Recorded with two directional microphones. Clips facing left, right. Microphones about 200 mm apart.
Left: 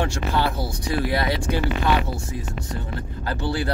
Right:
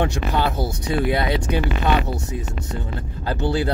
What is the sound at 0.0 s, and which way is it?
Speech, 20° right (ahead or behind).